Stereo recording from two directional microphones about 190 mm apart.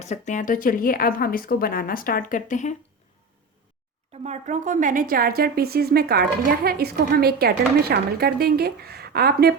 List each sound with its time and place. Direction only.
0.0 s a woman's voice: 40° left (ahead or behind)
4.2 s a woman's voice: 40° right (ahead or behind); by 9.6 s 55° right (ahead or behind)